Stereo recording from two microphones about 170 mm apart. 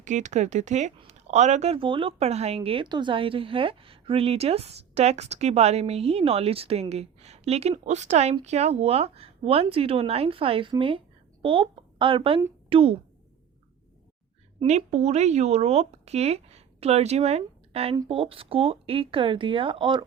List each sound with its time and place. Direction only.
0.0 s speech: 45° right (ahead or behind)
14.6 s speech: 40° right (ahead or behind)